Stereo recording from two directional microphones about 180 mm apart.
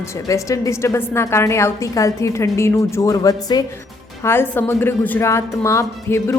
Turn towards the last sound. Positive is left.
turn(degrees=15)  # may be behind; listen again after turning